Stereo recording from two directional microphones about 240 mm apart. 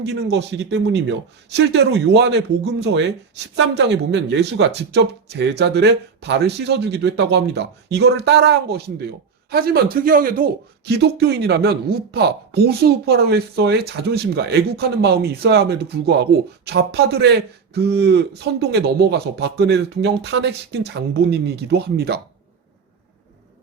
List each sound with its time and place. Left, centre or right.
0.0 s speech: right